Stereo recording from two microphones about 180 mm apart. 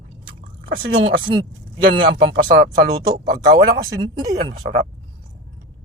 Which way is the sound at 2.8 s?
55° right (ahead or behind).